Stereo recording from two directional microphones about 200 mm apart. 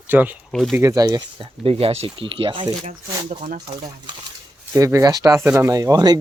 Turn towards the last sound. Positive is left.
turn(degrees=-20)  # may be behind; listen again after turning